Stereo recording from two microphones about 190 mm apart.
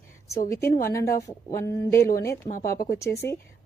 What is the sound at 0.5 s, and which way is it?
A woman's voice, 15° left (ahead or behind).